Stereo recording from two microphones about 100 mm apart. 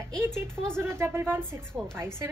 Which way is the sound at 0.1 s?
5° left (ahead or behind).